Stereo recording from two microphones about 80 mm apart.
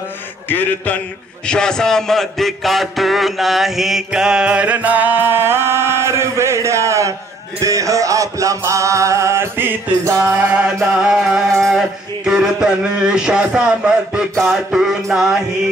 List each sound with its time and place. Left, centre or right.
0.5 s a sound: left
1.4 s a man's voice: centre; by 7.2 s right
7.6 s music: right
10.0 s music: right
10.6 s a man's voice: centre